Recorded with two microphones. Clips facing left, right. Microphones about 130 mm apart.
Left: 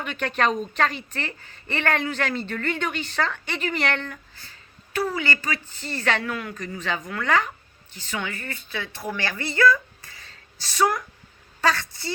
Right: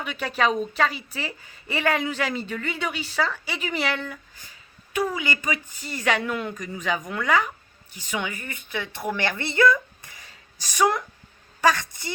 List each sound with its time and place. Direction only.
0.0 s a woman's voice: 5° right (ahead or behind)
9.1 s a sound: 20° right (ahead or behind)
11.6 s a woman's voice: 15° right (ahead or behind)